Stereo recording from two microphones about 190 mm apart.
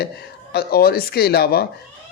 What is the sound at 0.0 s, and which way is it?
Speech, 55° left (ahead or behind).